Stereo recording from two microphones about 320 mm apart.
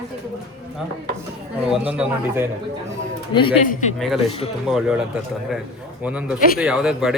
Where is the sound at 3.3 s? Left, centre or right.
Centre.